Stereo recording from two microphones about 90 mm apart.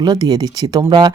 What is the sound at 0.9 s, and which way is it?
Speech, 55° right (ahead or behind).